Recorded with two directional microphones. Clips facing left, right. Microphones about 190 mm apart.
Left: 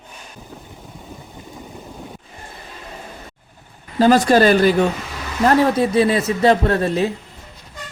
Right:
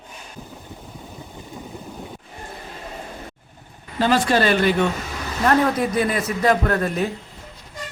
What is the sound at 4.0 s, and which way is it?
Speech, 40° left (ahead or behind).